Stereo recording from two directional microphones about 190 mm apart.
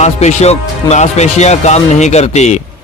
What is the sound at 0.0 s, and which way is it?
Speech, 35° left (ahead or behind).